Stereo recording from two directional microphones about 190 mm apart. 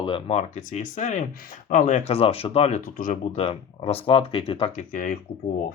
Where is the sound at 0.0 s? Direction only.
30° left (ahead or behind).